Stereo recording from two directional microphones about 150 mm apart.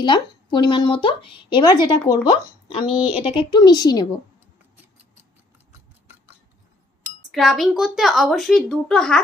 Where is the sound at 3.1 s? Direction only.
35° left (ahead or behind).